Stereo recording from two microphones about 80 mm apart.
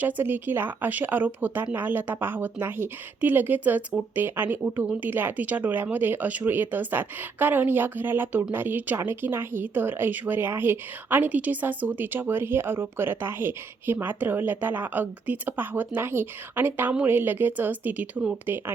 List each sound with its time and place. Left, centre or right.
0.0 s speech: right